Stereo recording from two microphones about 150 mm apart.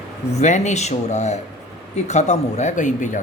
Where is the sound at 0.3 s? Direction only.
50° left (ahead or behind).